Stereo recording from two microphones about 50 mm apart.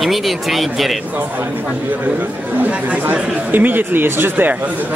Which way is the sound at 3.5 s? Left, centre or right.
Right.